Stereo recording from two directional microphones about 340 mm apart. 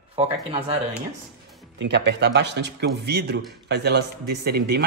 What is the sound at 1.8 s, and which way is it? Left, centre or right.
A man's voice, right.